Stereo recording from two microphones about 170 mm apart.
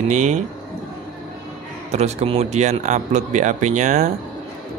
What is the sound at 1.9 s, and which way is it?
Speech, 40° right (ahead or behind).